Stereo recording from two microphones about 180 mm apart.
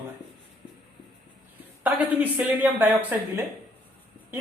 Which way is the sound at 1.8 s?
10° right (ahead or behind).